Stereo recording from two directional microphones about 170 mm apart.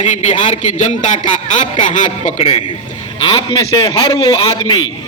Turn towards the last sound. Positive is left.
turn(degrees=25)  # may be behind; listen again after turning